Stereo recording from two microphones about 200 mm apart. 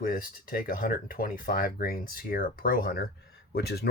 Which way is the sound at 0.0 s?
45° left (ahead or behind).